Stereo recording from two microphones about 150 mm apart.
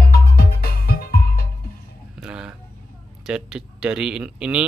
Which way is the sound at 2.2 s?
5° right (ahead or behind).